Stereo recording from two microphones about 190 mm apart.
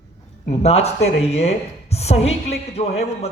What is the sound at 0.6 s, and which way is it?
Speech, 35° left (ahead or behind).